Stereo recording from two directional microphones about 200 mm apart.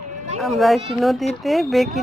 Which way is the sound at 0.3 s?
Centre (ahead or behind).